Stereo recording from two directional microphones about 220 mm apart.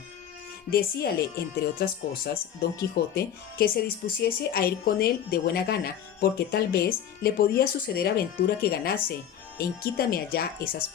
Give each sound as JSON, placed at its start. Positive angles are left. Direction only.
{"t": 0.7, "sound": "speech", "side_deg": 45}